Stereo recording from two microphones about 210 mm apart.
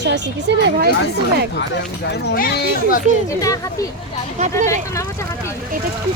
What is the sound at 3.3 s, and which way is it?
Speech, 15° left (ahead or behind).